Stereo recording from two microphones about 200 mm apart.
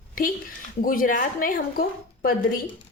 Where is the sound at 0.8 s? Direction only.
45° left (ahead or behind).